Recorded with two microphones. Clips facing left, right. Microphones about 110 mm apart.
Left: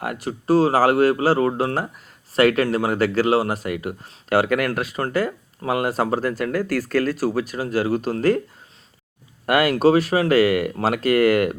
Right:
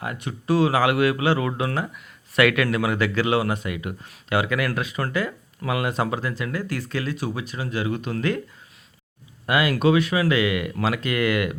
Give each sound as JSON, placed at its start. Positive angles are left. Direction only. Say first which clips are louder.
{"t": 0.0, "sound": "speech", "louder": "left 4 dB", "side_deg": 55}
{"t": 0.4, "sound": "speech", "louder": "left 3 dB", "side_deg": 35}
{"t": 9.5, "sound": "speech", "louder": "left 3 dB", "side_deg": 45}